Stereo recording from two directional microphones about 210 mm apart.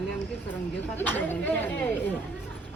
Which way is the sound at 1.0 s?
10° left (ahead or behind).